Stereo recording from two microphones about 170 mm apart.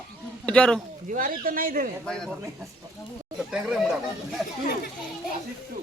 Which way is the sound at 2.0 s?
5° left (ahead or behind).